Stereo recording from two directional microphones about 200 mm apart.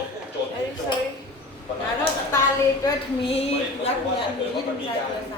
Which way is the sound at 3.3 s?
30° left (ahead or behind).